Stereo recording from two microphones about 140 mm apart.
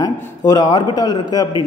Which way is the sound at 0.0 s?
30° left (ahead or behind).